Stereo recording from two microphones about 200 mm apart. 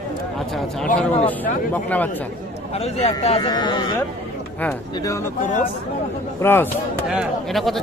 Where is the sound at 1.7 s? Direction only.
10° left (ahead or behind).